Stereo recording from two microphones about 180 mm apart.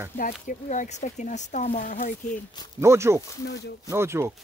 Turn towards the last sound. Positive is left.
turn(degrees=-15)  # may be behind; listen again after turning